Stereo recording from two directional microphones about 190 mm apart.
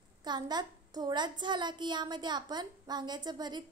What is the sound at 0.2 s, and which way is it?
A woman's voice, 20° right (ahead or behind).